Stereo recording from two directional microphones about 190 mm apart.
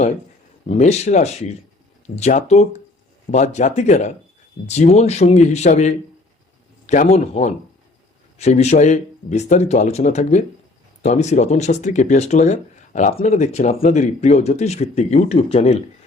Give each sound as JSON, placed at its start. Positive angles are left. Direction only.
{"t": 0.7, "sound": "speech", "side_deg": 35}